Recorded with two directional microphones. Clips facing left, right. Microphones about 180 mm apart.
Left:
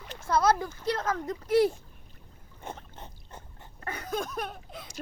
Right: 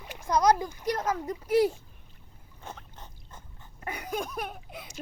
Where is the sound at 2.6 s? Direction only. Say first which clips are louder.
Left 3 dB; 25° left (ahead or behind).